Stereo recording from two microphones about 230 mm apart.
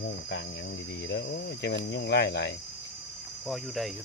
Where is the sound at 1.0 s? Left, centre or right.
Left.